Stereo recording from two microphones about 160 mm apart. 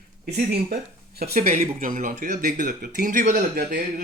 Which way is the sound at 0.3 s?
90° right.